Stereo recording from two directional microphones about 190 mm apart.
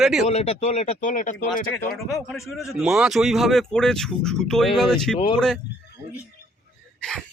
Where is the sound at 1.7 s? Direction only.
5° left (ahead or behind).